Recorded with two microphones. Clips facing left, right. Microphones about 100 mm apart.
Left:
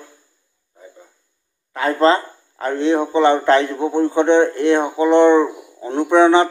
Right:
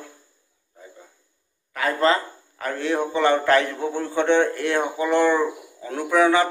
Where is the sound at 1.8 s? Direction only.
30° left (ahead or behind).